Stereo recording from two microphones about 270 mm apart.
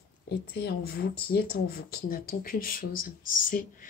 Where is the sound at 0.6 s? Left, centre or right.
Left.